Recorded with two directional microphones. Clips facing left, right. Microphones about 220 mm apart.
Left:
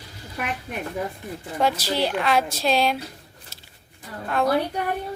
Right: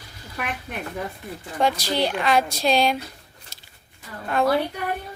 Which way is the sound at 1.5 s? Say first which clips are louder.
Right 1 dB; 5° left (ahead or behind).